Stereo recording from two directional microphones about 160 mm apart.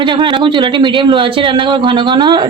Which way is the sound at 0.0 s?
30° right (ahead or behind).